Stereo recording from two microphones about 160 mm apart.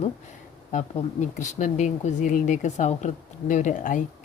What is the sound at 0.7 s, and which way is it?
Speech, 50° left (ahead or behind).